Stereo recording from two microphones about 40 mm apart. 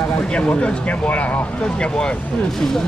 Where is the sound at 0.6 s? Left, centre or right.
Left.